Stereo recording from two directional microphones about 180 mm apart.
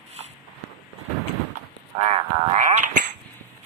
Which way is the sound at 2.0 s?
35° right (ahead or behind).